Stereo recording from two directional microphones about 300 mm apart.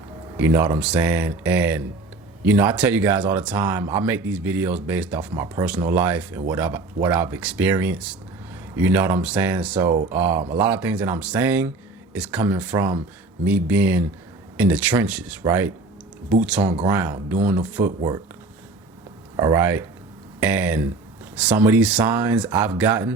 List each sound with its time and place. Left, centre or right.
0.3 s speech: centre
19.4 s speech: centre